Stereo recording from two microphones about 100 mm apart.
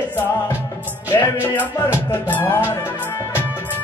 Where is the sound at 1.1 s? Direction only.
25° left (ahead or behind).